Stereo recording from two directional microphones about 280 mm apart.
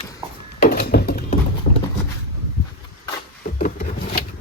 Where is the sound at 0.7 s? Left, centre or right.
Left.